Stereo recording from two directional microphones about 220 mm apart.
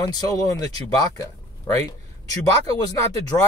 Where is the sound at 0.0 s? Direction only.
15° left (ahead or behind).